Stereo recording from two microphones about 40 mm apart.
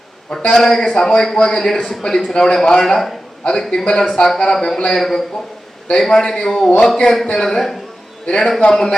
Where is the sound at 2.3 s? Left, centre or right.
Centre.